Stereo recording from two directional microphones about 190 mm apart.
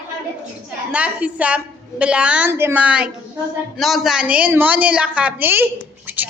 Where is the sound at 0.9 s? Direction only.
5° right (ahead or behind).